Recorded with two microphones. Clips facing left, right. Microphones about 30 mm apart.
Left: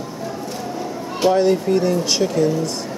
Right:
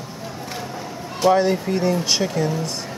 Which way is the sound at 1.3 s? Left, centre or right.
Centre.